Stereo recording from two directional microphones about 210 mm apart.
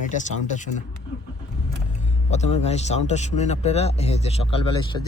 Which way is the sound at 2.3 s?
30° left (ahead or behind).